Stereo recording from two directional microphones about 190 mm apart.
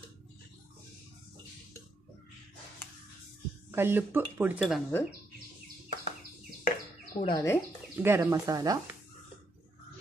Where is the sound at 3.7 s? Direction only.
10° right (ahead or behind).